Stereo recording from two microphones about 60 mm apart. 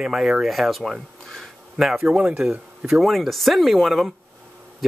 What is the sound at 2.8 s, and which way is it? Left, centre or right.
Speech, centre.